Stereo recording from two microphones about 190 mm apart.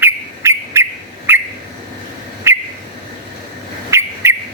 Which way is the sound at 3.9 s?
15° right (ahead or behind).